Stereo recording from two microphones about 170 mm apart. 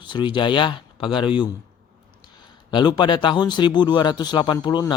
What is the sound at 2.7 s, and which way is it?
Speech, 25° left (ahead or behind).